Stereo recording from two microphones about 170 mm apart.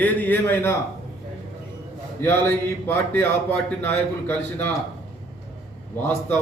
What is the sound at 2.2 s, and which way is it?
A man's voice, 15° left (ahead or behind).